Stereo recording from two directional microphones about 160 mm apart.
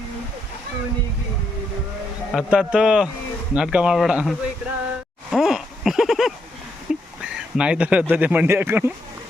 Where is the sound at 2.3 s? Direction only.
5° right (ahead or behind).